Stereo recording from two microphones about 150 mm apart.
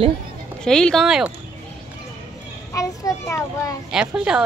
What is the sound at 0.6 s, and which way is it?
Speech, 5° left (ahead or behind).